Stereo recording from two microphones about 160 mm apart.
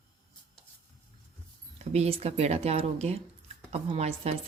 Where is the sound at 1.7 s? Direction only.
40° right (ahead or behind).